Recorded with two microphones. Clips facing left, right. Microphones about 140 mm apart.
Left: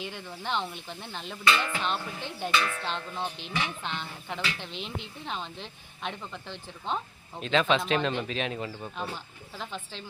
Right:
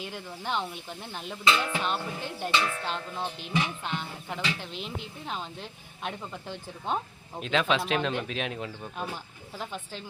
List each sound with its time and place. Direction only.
0.0 s speech: 5° right (ahead or behind)
2.5 s music: 25° right (ahead or behind)
2.8 s speech: 5° right (ahead or behind)